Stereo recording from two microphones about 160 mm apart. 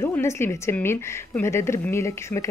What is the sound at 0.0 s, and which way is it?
A woman's voice, 15° left (ahead or behind).